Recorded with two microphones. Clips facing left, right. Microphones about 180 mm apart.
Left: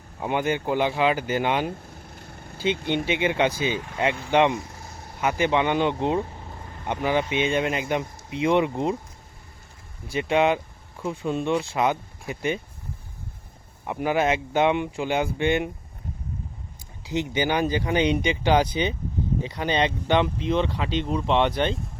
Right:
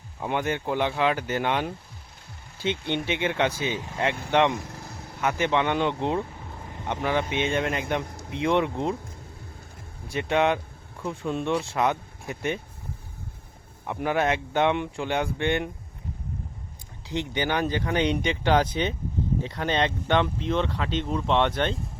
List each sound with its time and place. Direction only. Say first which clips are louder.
0.2 s speech: left 2 dB; 5° left (ahead or behind)
2.9 s speech: left 2 dB; 5° left (ahead or behind)
4.7 s vehicle: right 2 dB; 60° right (ahead or behind)
5.2 s speech: left 2 dB; 5° left (ahead or behind)
10.1 s speech: left 2 dB; 5° left (ahead or behind)
13.8 s speech: left 2 dB; 5° left (ahead or behind)
17.1 s speech: left 3 dB; 5° left (ahead or behind)